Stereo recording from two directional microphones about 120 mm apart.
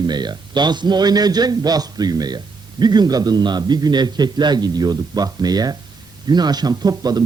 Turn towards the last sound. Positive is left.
turn(degrees=-35)  # may be behind; listen again after turning